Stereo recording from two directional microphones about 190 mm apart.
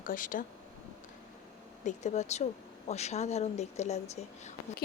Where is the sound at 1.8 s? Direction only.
40° left (ahead or behind).